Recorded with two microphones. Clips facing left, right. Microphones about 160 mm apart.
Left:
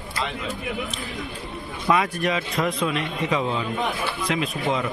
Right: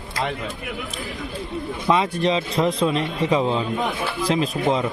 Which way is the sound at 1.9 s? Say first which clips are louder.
Right 2 dB; 25° right (ahead or behind).